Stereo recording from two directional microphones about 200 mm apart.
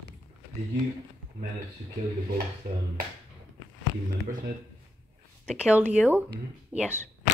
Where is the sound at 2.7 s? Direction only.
45° right (ahead or behind).